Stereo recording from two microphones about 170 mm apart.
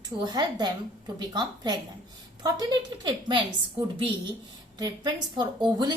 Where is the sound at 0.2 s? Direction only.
25° right (ahead or behind).